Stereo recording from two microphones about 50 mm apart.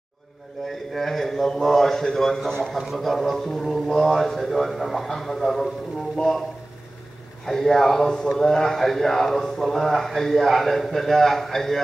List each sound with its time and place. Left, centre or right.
0.7 s a man's voice: centre
7.4 s a man's voice: centre